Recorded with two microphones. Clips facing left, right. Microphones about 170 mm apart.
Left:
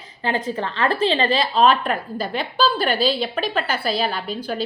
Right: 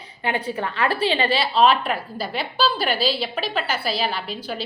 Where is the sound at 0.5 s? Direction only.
30° left (ahead or behind).